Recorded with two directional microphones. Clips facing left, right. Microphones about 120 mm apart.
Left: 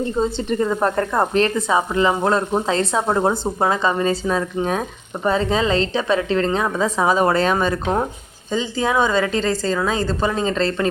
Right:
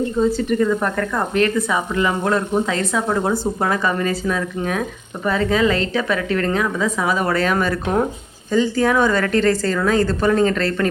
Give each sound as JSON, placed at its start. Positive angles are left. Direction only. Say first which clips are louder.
{"t": 0.2, "sound": "speech", "louder": "right 3 dB", "side_deg": 25}